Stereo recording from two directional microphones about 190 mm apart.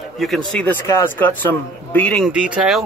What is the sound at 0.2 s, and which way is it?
A man's voice, centre (ahead or behind).